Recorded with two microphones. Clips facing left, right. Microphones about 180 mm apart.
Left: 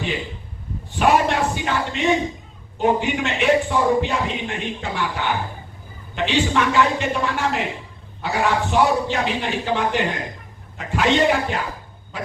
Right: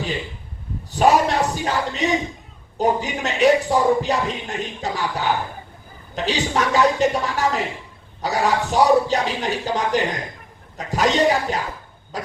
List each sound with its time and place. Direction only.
0.9 s a man's voice: 40° right (ahead or behind)